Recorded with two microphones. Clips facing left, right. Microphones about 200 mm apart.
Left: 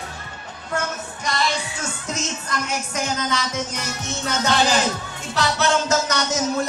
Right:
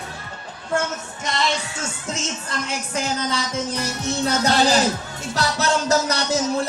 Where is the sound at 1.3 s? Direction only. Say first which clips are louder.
Even; 25° right (ahead or behind).